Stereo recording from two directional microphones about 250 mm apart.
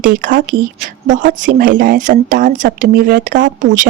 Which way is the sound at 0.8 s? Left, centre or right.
Right.